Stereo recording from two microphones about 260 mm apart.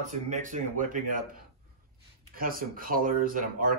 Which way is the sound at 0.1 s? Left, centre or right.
Right.